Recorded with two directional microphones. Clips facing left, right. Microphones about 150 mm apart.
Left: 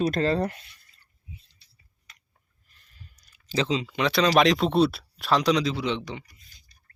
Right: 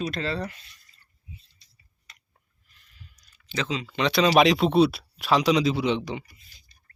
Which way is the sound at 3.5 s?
30° left (ahead or behind).